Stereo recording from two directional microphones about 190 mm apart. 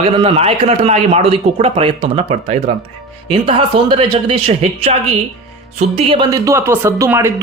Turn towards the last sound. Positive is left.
turn(degrees=-15)  # may be behind; listen again after turning